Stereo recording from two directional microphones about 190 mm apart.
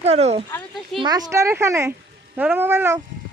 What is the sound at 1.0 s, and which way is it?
Speech, 20° right (ahead or behind).